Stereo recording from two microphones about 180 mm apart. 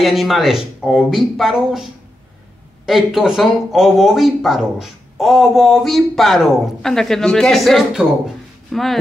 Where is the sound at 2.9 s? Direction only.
5° right (ahead or behind).